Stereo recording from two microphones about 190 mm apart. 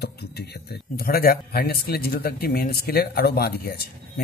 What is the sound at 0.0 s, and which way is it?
A man's voice, 60° left (ahead or behind).